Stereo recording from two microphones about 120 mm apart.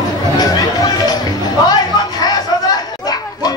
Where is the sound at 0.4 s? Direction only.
30° left (ahead or behind).